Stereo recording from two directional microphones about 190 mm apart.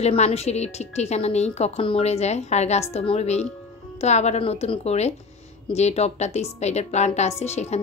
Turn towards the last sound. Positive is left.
turn(degrees=35)  # may be behind; listen again after turning